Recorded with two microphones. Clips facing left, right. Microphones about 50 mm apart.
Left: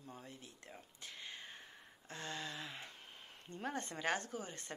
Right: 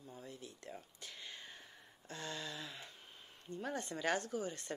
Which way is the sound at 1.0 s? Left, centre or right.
Left.